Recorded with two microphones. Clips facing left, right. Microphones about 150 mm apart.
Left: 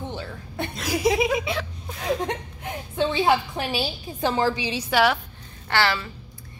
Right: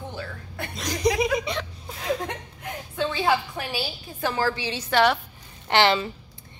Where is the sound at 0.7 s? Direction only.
5° left (ahead or behind).